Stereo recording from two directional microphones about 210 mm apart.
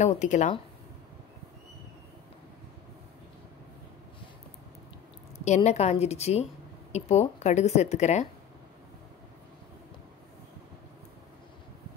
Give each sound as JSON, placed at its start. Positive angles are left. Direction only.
{"t": 0.0, "sound": "speech", "side_deg": 35}
{"t": 5.4, "sound": "speech", "side_deg": 35}